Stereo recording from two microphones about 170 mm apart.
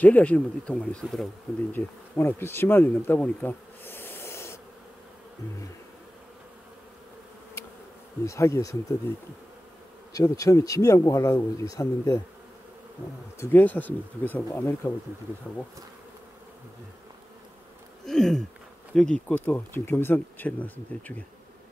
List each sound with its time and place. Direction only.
0.0 s speech: 10° left (ahead or behind)
8.3 s speech: 15° left (ahead or behind)
10.1 s speech: 20° left (ahead or behind)
13.4 s speech: 10° left (ahead or behind)
18.0 s a sound: 5° left (ahead or behind)
18.9 s speech: 5° left (ahead or behind)